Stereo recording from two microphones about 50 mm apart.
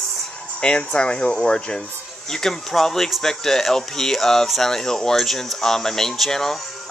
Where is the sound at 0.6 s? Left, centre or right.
Centre.